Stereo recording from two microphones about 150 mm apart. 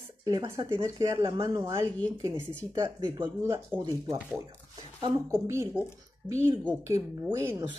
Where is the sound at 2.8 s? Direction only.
25° right (ahead or behind).